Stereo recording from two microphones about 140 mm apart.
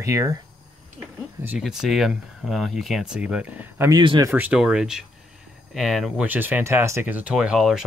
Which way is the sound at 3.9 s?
35° right (ahead or behind).